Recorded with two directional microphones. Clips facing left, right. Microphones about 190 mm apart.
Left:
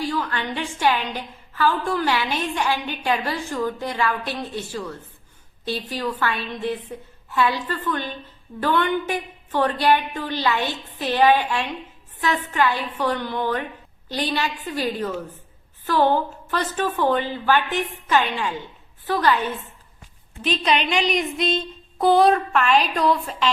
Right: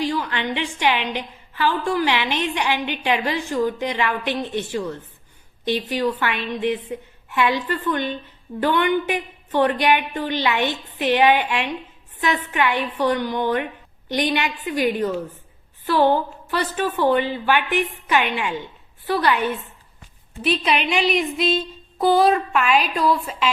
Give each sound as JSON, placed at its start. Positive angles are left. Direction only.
{"t": 0.0, "sound": "a woman's voice", "side_deg": -15}
{"t": 20.4, "sound": "speech", "side_deg": -10}